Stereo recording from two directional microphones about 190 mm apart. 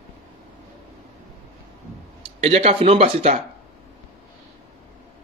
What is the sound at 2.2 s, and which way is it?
Speech, 35° right (ahead or behind).